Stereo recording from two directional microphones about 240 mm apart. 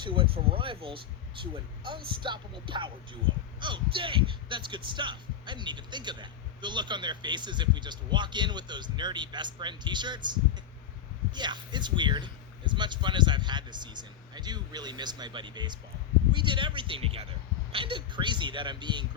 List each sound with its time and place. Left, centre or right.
0.0 s speech: right